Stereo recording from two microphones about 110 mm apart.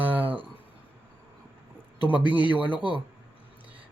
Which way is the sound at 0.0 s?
15° right (ahead or behind).